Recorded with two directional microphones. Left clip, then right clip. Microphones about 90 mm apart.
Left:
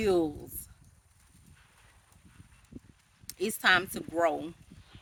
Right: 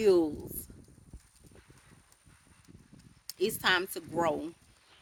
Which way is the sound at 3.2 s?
40° left (ahead or behind).